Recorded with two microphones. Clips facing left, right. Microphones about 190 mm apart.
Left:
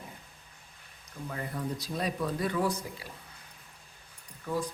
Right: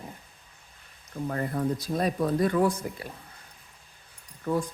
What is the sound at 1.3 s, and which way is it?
Speech, 50° right (ahead or behind).